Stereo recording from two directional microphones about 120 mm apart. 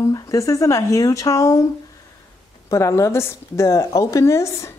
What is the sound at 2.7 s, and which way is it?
Speech, 25° left (ahead or behind).